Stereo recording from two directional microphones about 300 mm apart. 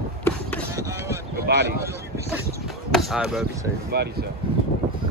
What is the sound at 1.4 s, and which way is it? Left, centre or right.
Speech, right.